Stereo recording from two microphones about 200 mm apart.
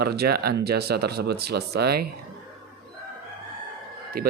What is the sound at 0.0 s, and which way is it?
Speech, 50° right (ahead or behind).